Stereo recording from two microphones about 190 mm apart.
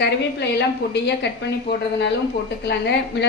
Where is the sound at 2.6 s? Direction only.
60° left (ahead or behind).